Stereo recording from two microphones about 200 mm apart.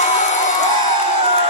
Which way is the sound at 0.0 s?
35° left (ahead or behind).